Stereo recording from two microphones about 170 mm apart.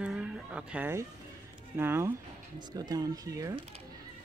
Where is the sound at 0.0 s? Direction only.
5° right (ahead or behind).